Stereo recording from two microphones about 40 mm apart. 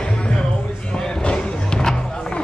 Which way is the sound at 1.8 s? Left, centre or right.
Centre.